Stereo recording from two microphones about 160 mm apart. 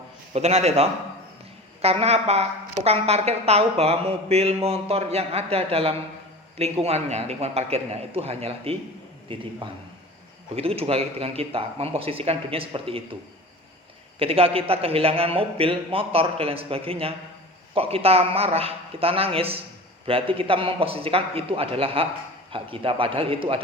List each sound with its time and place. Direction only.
0.3 s speech: 40° right (ahead or behind)
10.5 s speech: 35° right (ahead or behind)
14.2 s speech: 35° right (ahead or behind)